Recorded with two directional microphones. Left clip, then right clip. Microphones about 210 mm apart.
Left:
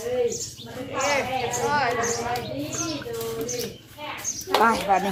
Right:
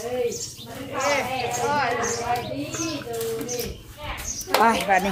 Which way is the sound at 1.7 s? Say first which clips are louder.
Left 1 dB; 10° left (ahead or behind).